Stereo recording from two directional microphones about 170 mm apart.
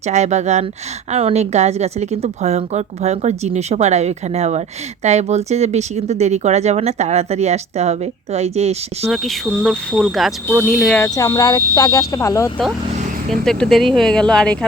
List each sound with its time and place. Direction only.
0.0 s speech: 40° right (ahead or behind)
9.0 s speech: centre (ahead or behind)
10.9 s speech: 15° left (ahead or behind)
13.3 s speech: 5° left (ahead or behind)